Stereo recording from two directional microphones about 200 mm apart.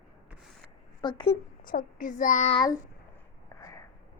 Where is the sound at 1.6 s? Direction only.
45° left (ahead or behind); by 2.8 s 20° left (ahead or behind).